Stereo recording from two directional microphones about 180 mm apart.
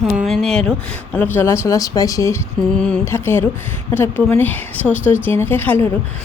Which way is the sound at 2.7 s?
5° left (ahead or behind).